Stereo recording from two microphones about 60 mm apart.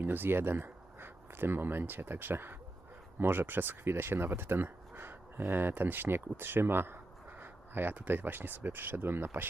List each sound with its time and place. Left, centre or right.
0.0 s speech: right